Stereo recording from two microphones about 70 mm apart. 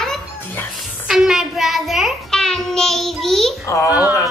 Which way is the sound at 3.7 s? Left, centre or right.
Left.